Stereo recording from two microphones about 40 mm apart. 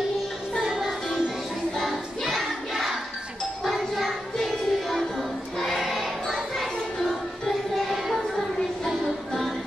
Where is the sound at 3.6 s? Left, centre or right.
Centre.